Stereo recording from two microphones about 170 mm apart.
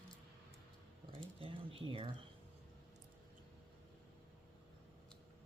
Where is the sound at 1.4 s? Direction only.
30° right (ahead or behind).